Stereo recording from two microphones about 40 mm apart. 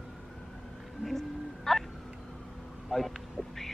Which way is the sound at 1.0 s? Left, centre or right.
Centre.